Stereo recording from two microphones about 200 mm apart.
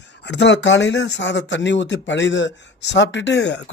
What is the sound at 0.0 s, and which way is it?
Speech, 60° left (ahead or behind).